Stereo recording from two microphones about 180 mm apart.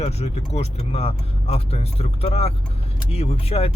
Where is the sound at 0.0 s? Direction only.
35° left (ahead or behind).